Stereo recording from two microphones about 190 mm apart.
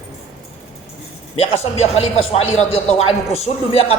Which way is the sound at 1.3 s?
35° left (ahead or behind).